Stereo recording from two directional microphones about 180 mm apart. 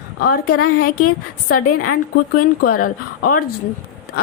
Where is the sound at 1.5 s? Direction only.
50° left (ahead or behind).